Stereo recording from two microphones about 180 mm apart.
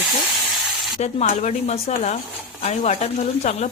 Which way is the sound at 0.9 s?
40° left (ahead or behind).